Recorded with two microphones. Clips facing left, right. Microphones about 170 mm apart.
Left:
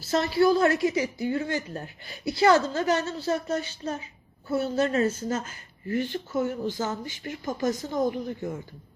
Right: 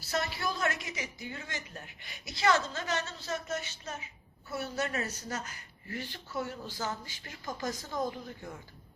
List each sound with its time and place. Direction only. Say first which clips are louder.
0.1 s a woman's voice: left 13 dB; 30° left (ahead or behind)